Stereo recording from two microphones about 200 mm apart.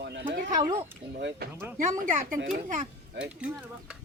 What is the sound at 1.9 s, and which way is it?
Speech, 40° right (ahead or behind).